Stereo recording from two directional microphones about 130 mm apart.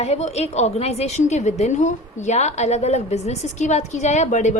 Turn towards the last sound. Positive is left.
turn(degrees=65)  # may be behind; listen again after turning